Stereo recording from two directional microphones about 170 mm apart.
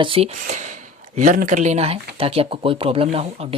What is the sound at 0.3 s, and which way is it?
Speech, 50° right (ahead or behind).